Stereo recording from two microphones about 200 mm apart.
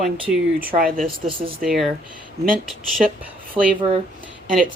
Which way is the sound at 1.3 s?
25° right (ahead or behind).